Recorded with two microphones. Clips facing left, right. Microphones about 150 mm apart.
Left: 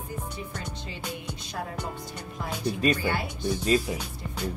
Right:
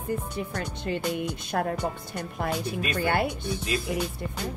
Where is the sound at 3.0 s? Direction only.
55° right (ahead or behind).